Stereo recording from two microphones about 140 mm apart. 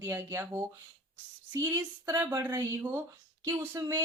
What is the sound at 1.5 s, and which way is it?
A woman's voice, 25° right (ahead or behind).